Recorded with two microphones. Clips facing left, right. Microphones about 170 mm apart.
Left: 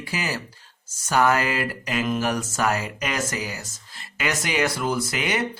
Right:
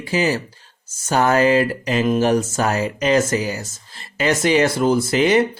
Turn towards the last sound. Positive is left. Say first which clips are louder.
# right 9 dB
turn(degrees=-30)  # may be behind; listen again after turning